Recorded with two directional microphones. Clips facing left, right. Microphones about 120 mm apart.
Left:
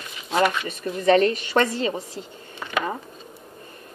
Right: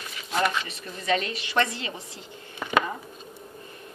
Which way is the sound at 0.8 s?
50° left (ahead or behind).